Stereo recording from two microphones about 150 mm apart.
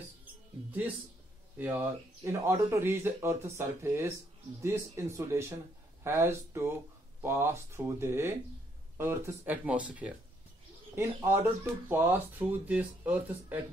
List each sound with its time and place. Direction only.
1.6 s speech: 15° right (ahead or behind)